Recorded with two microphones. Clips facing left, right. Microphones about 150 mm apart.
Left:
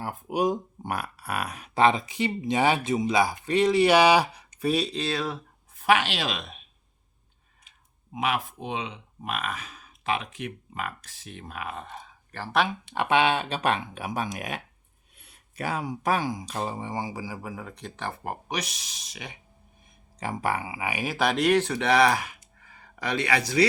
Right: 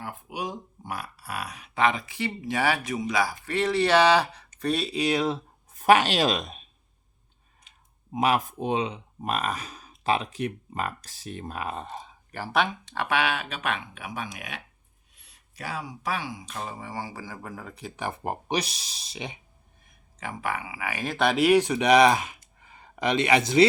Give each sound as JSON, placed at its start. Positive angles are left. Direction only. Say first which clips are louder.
{"t": 0.0, "sound": "speech", "louder": "left 8 dB", "side_deg": 45}
{"t": 1.7, "sound": "speech", "louder": "left 3 dB", "side_deg": 30}
{"t": 2.0, "sound": "speech", "louder": "left 4 dB", "side_deg": 20}
{"t": 4.7, "sound": "speech", "louder": "left 1 dB", "side_deg": 0}
{"t": 4.9, "sound": "speech", "louder": "right 4 dB", "side_deg": -15}
{"t": 5.7, "sound": "speech", "louder": "right 4 dB", "side_deg": -40}
{"t": 8.1, "sound": "speech", "louder": "right 4 dB", "side_deg": -40}
{"t": 12.3, "sound": "speech", "louder": "right 2 dB", "side_deg": -10}
{"t": 12.5, "sound": "speech", "louder": "even", "side_deg": 5}
{"t": 12.9, "sound": "speech", "louder": "left 4 dB", "side_deg": 20}
{"t": 15.1, "sound": "speech", "louder": "left 8 dB", "side_deg": 55}
{"t": 18.2, "sound": "speech", "louder": "right 6 dB", "side_deg": -25}
{"t": 20.1, "sound": "speech", "louder": "left 3 dB", "side_deg": 35}